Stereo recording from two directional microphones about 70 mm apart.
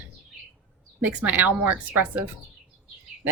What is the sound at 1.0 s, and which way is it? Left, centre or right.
A woman's voice, right.